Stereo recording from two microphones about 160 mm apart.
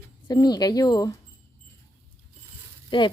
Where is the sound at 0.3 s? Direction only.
25° left (ahead or behind).